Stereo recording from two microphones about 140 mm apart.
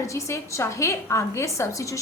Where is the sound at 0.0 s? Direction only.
20° left (ahead or behind).